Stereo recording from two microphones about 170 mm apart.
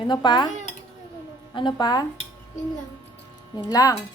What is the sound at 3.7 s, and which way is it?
Cutlery, 20° left (ahead or behind).